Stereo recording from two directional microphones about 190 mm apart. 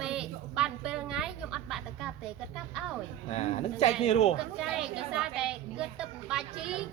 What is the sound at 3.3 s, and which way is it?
Speech, 35° left (ahead or behind).